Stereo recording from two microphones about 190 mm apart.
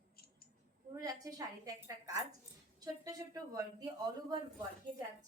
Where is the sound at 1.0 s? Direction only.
20° right (ahead or behind).